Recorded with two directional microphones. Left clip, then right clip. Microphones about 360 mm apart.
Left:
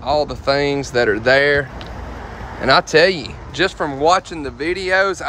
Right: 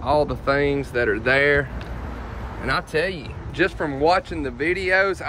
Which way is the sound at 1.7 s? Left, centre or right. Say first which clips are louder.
Left 4 dB; left.